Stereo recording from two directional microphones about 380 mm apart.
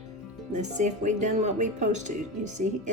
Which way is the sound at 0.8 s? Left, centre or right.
Centre.